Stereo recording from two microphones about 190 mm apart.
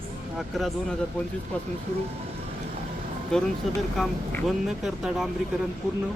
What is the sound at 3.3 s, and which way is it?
Speech, 5° left (ahead or behind).